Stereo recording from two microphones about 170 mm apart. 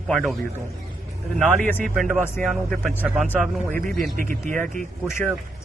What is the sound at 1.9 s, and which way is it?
A man's voice, centre (ahead or behind).